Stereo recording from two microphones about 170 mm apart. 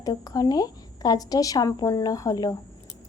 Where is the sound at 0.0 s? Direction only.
20° left (ahead or behind).